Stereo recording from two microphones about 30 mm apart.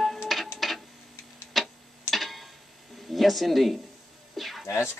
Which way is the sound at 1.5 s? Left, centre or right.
Centre.